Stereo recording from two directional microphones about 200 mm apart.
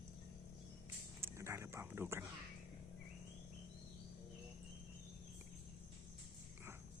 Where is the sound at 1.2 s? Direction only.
15° right (ahead or behind).